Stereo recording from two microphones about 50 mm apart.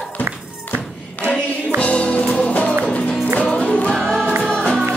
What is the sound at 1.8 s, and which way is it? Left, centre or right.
Music, left.